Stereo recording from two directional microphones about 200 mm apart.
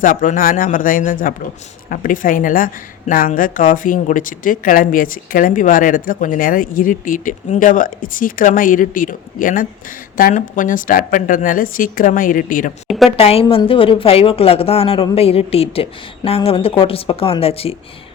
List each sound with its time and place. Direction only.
0.0 s a woman's voice: 40° left (ahead or behind)
13.1 s a woman's voice: 30° left (ahead or behind)